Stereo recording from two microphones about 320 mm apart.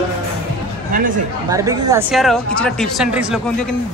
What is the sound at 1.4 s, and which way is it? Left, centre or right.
Speech, centre.